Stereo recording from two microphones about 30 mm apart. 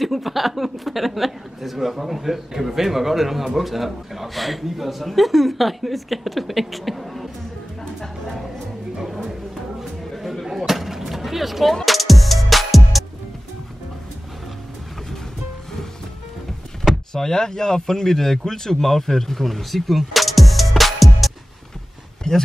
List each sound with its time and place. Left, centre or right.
0.0 s a man's voice: centre
10.7 s vehicle: centre
11.8 s music: centre
17.1 s speech: centre
19.4 s music: centre
22.3 s speech: left